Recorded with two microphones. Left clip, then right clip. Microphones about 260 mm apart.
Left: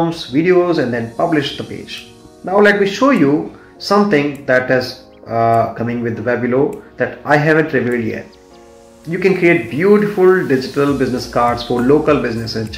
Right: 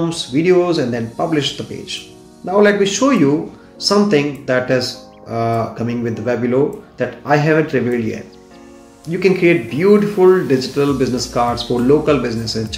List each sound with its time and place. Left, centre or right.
0.0 s speech: centre
1.0 s speech: centre
2.4 s speech: centre